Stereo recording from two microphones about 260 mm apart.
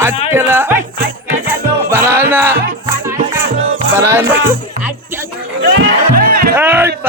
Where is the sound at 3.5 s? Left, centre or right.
Right.